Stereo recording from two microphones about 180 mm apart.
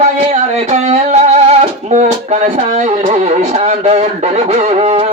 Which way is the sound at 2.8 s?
40° right (ahead or behind).